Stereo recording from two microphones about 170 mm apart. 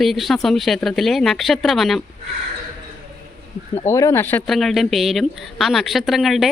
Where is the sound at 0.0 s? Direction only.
Centre (ahead or behind).